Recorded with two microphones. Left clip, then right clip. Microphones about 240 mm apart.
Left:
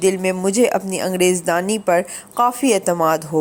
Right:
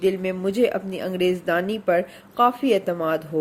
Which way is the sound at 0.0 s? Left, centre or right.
Left.